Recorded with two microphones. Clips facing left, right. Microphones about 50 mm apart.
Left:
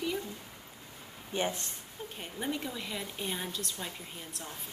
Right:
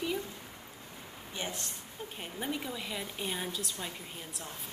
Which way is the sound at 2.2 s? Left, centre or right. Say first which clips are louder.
Left 1 dB; centre.